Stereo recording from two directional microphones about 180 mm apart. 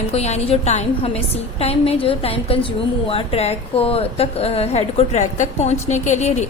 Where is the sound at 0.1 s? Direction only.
35° left (ahead or behind).